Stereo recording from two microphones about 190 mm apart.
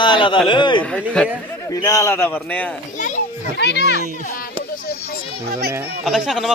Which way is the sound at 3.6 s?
60° left (ahead or behind).